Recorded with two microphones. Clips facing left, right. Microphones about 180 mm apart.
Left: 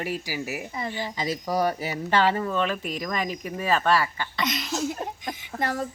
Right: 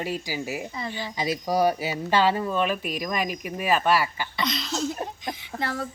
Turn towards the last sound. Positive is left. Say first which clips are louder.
# left 2 dB
turn(degrees=40)  # may be behind; listen again after turning